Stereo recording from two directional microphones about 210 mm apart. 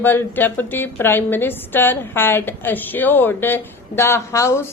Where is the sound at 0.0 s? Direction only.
10° left (ahead or behind).